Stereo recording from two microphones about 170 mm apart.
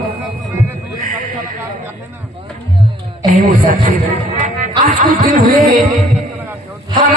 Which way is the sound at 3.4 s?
55° right (ahead or behind).